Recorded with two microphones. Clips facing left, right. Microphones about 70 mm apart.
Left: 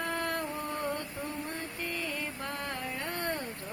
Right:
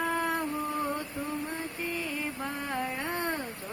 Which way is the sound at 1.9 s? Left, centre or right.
Centre.